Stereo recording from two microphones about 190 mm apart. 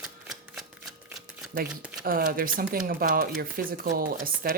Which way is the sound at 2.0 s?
50° right (ahead or behind).